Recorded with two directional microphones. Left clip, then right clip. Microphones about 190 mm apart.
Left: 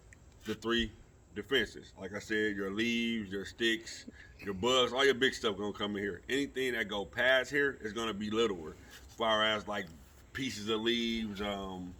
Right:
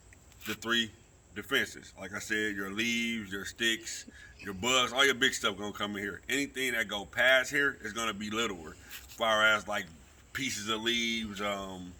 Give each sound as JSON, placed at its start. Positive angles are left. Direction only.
{"t": 0.4, "sound": "speech", "side_deg": -10}